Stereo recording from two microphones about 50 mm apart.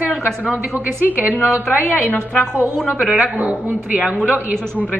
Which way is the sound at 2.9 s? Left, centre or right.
Right.